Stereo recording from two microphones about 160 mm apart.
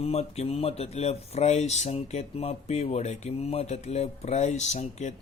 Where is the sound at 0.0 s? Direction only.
40° left (ahead or behind).